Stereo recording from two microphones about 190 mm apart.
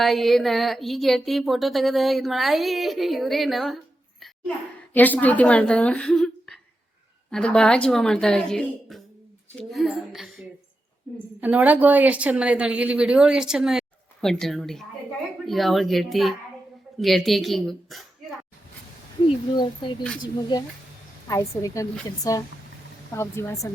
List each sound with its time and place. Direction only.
0.0 s speech: centre (ahead or behind)
4.9 s speech: 10° left (ahead or behind)
19.5 s a woman's voice: 25° left (ahead or behind)